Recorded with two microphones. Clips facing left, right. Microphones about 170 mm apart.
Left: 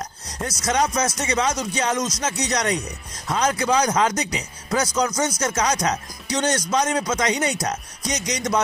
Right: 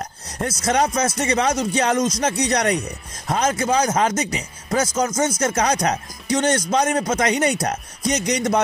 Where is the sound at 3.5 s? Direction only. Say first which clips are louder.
Right 1 dB; 25° right (ahead or behind).